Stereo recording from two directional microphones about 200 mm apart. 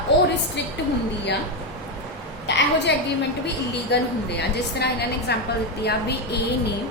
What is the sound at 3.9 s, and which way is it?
A woman's voice, 55° left (ahead or behind).